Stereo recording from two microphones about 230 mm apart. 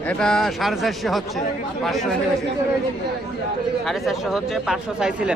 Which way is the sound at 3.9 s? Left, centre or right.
Centre.